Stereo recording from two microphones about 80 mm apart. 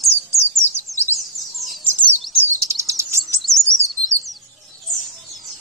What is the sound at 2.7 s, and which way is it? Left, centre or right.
Chirp, right.